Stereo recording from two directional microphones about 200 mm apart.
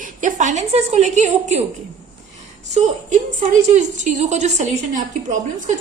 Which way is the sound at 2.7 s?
35° right (ahead or behind).